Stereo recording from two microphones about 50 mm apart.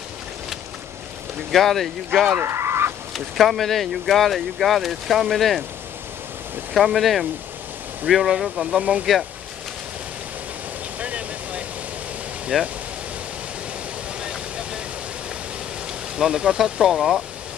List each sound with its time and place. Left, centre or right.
1.5 s speech: centre
2.4 s fowl: right
3.1 s speech: centre
6.7 s speech: centre
8.6 s speech: right
11.0 s vehicle: right
12.5 s speech: centre
16.2 s speech: centre